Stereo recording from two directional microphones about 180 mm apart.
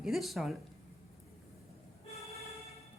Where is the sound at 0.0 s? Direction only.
Centre (ahead or behind).